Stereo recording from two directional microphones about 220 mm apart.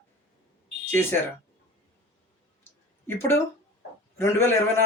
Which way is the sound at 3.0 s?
10° left (ahead or behind).